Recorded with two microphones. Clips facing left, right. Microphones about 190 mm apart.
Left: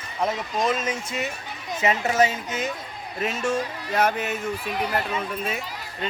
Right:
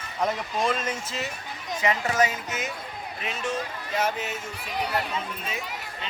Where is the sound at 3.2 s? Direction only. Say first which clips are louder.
Left 6 dB; 45° left (ahead or behind).